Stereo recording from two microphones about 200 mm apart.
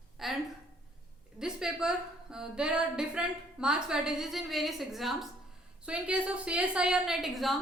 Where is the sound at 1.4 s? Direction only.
Centre (ahead or behind).